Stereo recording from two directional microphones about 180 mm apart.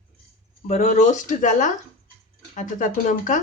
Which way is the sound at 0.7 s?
40° left (ahead or behind).